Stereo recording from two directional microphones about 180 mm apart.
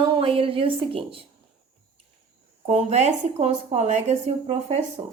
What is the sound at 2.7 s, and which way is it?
A woman's voice, 35° right (ahead or behind).